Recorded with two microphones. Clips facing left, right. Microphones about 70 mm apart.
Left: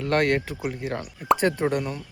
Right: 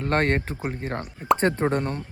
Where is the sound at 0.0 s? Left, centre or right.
Right.